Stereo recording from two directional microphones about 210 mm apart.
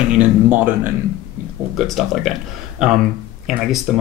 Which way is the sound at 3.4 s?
Centre (ahead or behind).